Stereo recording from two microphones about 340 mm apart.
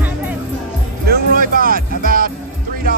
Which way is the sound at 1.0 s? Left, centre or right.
Right.